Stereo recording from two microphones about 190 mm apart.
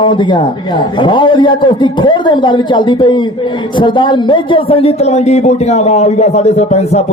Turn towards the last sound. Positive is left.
turn(degrees=35)  # may be behind; listen again after turning